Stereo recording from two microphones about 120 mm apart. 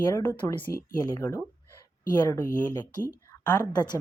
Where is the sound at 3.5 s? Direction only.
35° left (ahead or behind).